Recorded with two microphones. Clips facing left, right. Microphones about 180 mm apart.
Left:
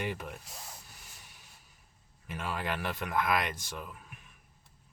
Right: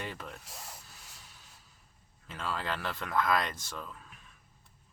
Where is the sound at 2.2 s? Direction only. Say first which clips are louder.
Left 1 dB; 15° left (ahead or behind).